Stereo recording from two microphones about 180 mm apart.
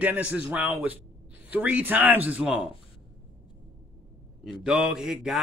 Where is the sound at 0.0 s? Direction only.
10° right (ahead or behind).